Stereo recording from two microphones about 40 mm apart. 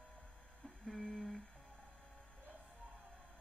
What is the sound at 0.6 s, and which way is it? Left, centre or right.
Humming, centre.